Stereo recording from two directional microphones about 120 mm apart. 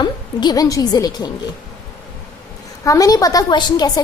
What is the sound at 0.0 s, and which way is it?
A woman's voice, 35° left (ahead or behind).